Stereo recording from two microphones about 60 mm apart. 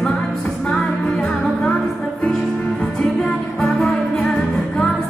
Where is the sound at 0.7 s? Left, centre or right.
Centre.